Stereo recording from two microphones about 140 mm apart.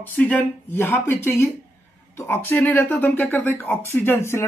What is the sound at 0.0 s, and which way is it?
Speech, 10° left (ahead or behind).